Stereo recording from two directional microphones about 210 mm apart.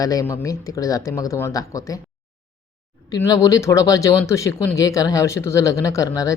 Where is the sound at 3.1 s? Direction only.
15° left (ahead or behind).